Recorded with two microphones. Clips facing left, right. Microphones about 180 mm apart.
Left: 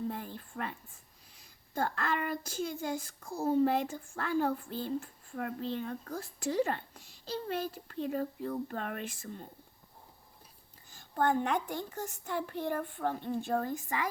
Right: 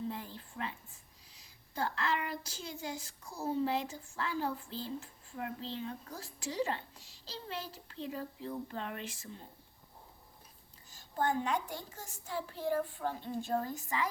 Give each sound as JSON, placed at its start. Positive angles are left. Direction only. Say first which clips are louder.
{"t": 0.1, "sound": "a sound", "louder": "left 3 dB", "side_deg": 55}
{"t": 1.4, "sound": "speech", "louder": "left 3 dB", "side_deg": 50}
{"t": 10.9, "sound": "a woman's voice", "louder": "left 4 dB", "side_deg": 55}